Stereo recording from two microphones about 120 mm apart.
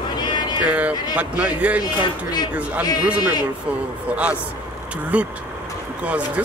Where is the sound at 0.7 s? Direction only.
10° right (ahead or behind).